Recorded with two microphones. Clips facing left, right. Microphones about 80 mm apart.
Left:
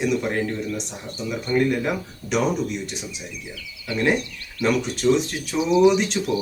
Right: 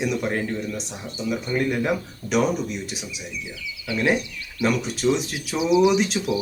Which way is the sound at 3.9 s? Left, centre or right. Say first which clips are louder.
Left 1 dB; centre.